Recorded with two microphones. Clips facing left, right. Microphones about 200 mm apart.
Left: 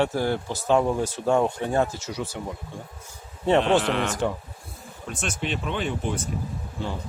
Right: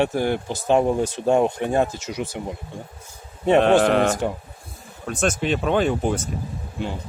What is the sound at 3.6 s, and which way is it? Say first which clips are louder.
Speech: right 8 dB; 50° right (ahead or behind).